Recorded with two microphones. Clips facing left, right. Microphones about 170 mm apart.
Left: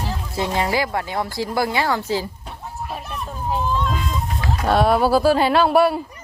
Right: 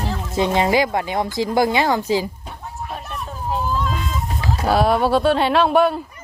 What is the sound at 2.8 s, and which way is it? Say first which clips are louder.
Children playing: even; centre (ahead or behind).